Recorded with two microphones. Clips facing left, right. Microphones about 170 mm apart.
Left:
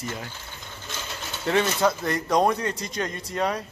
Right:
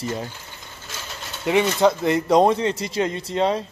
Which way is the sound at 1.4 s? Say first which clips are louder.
Right 4 dB; 20° right (ahead or behind).